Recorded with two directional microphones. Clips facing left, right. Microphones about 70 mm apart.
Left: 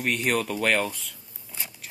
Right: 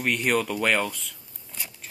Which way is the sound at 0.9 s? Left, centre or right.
Centre.